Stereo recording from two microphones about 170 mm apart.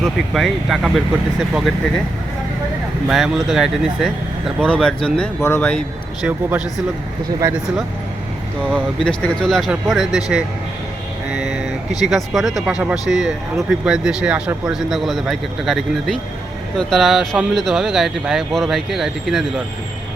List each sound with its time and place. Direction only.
0.0 s speech: centre (ahead or behind)
3.1 s speech: centre (ahead or behind)
7.3 s speech: 20° right (ahead or behind)
8.7 s speech: 5° left (ahead or behind)